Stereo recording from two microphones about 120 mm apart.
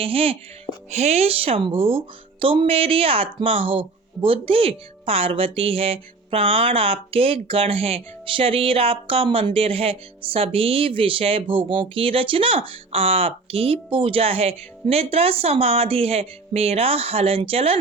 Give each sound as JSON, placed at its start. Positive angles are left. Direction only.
{"t": 0.0, "sound": "speech", "side_deg": -50}
{"t": 0.9, "sound": "speech", "side_deg": -65}